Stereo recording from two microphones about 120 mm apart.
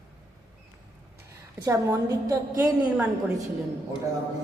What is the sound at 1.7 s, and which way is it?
A woman's voice, 30° right (ahead or behind).